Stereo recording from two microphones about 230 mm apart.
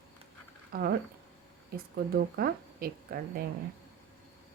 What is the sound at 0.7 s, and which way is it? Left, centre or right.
Speech, right.